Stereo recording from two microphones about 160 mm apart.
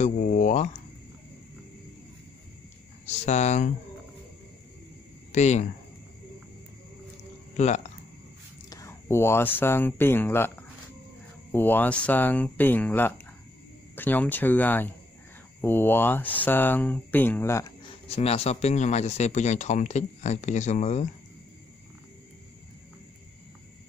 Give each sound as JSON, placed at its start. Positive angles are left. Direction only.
{"t": 0.0, "sound": "speech", "side_deg": 50}
{"t": 3.1, "sound": "speech", "side_deg": 45}
{"t": 5.3, "sound": "speech", "side_deg": 45}
{"t": 7.5, "sound": "speech", "side_deg": 45}
{"t": 8.6, "sound": "speech", "side_deg": 20}
{"t": 11.5, "sound": "speech", "side_deg": 10}
{"t": 17.8, "sound": "speech", "side_deg": 40}